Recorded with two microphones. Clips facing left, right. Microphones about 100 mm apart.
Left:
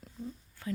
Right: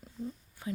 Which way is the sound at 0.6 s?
15° right (ahead or behind).